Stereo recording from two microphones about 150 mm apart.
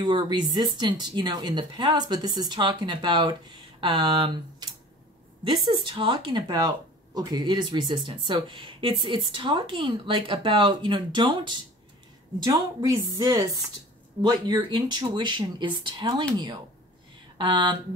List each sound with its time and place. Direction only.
0.0 s speech: 30° right (ahead or behind)
17.4 s speech: 30° right (ahead or behind)